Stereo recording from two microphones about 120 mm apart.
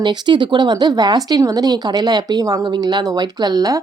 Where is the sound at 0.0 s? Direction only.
40° right (ahead or behind).